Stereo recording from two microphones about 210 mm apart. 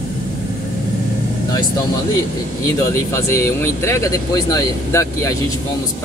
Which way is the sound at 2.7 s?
15° left (ahead or behind).